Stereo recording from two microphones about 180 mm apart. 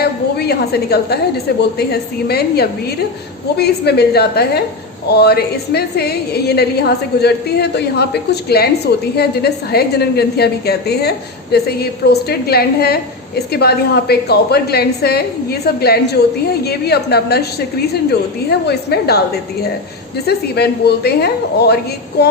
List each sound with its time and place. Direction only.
0.0 s a sound: 60° left (ahead or behind)
1.8 s a woman's voice: 65° left (ahead or behind)
18.6 s a woman's voice: 65° left (ahead or behind)
20.2 s a woman's voice: 65° left (ahead or behind)